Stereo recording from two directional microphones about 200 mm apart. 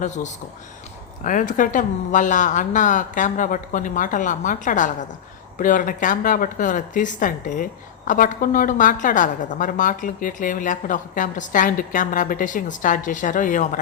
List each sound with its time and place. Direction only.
0.0 s speech: 35° left (ahead or behind)